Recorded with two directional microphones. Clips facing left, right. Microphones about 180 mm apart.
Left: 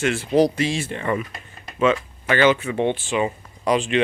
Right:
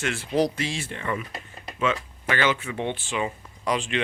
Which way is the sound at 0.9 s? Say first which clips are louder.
Left 4 dB; 45° left (ahead or behind).